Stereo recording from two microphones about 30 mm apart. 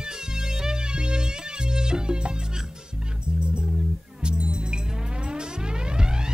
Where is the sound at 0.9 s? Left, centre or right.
Right.